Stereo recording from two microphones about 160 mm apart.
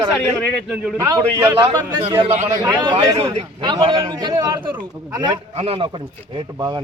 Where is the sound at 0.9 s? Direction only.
20° right (ahead or behind).